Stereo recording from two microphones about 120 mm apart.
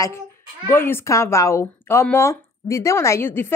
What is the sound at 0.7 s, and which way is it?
A woman's voice, 20° left (ahead or behind).